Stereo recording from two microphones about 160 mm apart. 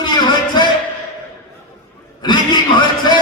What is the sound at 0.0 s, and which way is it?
Music, 25° left (ahead or behind).